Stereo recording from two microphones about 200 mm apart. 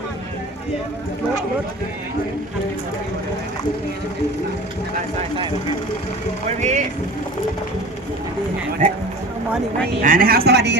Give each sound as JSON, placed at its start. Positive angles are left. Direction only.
{"t": 6.6, "sound": "speech", "side_deg": -35}
{"t": 8.8, "sound": "a man's voice", "side_deg": -35}